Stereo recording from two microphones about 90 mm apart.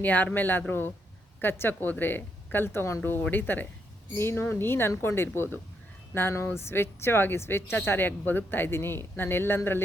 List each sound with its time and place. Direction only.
0.0 s speech: 20° left (ahead or behind)